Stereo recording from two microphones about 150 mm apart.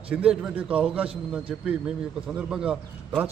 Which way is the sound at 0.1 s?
5° right (ahead or behind).